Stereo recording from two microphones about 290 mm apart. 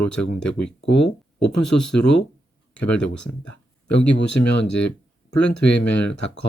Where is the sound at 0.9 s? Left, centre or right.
Left.